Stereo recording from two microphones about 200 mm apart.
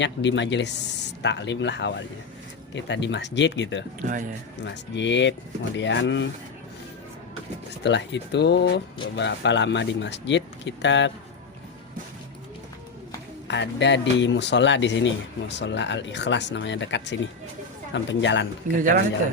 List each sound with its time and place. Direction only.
0.0 s speech: 60° left (ahead or behind)
7.9 s speech: 60° left (ahead or behind)
13.5 s speech: 60° left (ahead or behind)
18.6 s speech: 40° right (ahead or behind)